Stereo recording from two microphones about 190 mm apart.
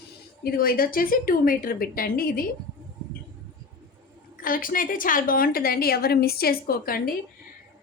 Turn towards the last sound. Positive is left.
turn(degrees=50)  # may be behind; listen again after turning